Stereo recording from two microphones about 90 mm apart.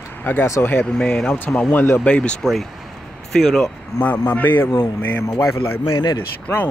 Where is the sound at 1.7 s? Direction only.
20° left (ahead or behind).